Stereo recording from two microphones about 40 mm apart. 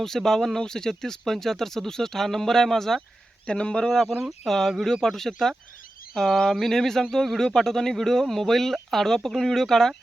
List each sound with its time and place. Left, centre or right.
0.0 s speech: centre
3.4 s speech: left